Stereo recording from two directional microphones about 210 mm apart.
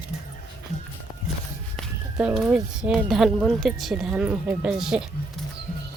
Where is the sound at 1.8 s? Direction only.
Centre (ahead or behind).